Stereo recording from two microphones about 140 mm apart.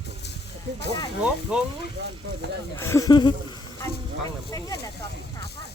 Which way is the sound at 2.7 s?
20° left (ahead or behind).